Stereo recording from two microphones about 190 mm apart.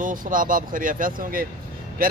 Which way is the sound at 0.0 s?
45° right (ahead or behind).